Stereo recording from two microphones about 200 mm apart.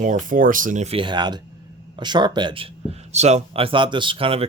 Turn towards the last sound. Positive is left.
turn(degrees=-30)  # may be behind; listen again after turning